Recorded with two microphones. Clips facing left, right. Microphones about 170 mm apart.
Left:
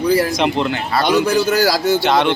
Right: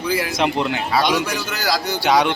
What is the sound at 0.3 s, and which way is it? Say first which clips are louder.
Speech: left 3 dB; 5° right (ahead or behind).